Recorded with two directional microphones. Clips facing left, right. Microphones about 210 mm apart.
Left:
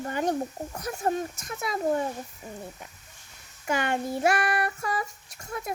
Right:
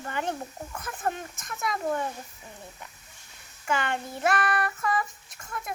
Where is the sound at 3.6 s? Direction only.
45° left (ahead or behind).